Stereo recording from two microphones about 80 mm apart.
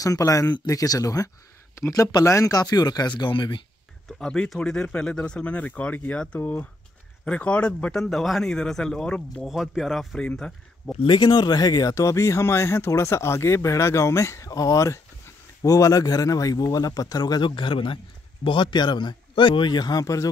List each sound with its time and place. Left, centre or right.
0.0 s speech: left
4.2 s speech: centre
9.5 s speech: centre
10.1 s speech: centre
11.1 s speech: left